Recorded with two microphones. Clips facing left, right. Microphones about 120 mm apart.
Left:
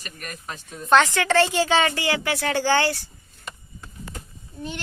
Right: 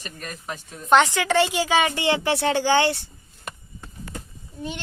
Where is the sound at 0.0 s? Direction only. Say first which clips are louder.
Right 1 dB; 25° right (ahead or behind).